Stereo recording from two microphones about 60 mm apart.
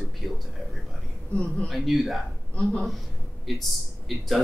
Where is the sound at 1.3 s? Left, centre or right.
Left.